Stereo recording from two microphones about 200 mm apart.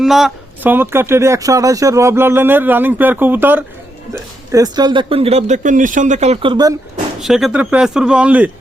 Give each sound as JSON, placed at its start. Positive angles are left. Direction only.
{"t": 0.0, "sound": "speech", "side_deg": 0}
{"t": 7.2, "sound": "a man's voice", "side_deg": 0}